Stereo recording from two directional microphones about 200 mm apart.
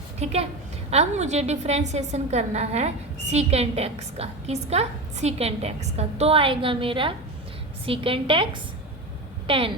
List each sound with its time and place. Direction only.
0.2 s a woman's voice: 30° right (ahead or behind)
9.5 s a woman's voice: 25° right (ahead or behind)